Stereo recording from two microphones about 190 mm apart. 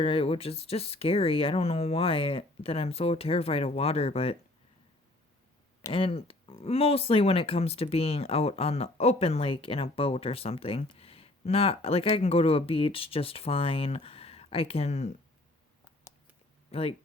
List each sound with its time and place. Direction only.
0.0 s speech: 30° left (ahead or behind)
5.9 s speech: 30° left (ahead or behind)
16.7 s speech: 30° left (ahead or behind)